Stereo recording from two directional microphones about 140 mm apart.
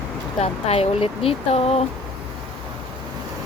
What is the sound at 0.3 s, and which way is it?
Speech, 45° left (ahead or behind).